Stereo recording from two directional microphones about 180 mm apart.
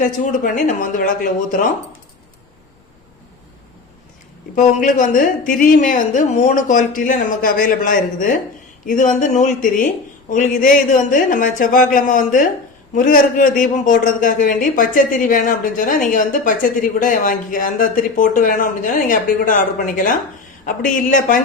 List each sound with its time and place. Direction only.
0.0 s a man's voice: 45° left (ahead or behind)
4.5 s a man's voice: 45° left (ahead or behind)